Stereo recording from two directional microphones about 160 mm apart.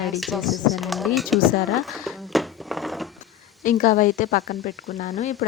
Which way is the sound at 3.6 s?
55° left (ahead or behind).